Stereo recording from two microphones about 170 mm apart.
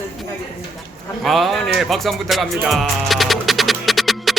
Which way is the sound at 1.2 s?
Centre (ahead or behind).